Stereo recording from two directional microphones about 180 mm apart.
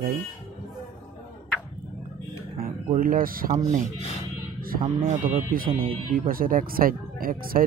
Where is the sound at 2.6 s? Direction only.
50° right (ahead or behind).